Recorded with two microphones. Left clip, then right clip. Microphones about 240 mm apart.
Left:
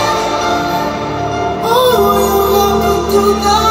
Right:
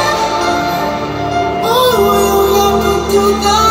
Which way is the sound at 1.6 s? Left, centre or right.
Right.